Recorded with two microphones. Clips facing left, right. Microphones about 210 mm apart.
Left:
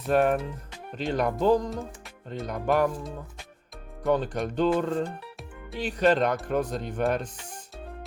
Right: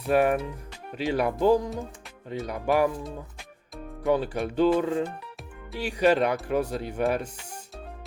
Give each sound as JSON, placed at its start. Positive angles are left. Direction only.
{"t": 0.1, "sound": "speech", "side_deg": -10}